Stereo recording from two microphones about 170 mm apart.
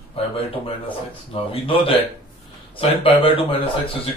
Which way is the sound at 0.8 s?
30° left (ahead or behind).